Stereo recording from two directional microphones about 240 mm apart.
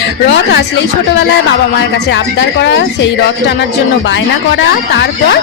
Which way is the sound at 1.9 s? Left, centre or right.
Left.